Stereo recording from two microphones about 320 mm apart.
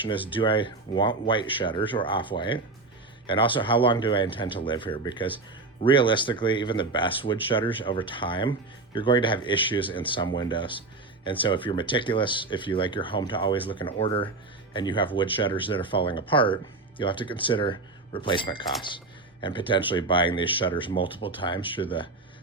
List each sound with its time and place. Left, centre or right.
0.3 s speech: centre